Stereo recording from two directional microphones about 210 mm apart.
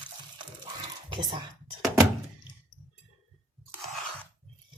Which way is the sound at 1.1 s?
20° right (ahead or behind).